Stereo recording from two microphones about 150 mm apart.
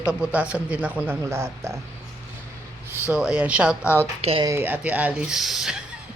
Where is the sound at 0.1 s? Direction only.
5° right (ahead or behind).